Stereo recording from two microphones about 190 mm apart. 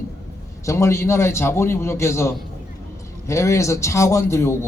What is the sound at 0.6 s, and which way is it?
A man's voice, 15° left (ahead or behind).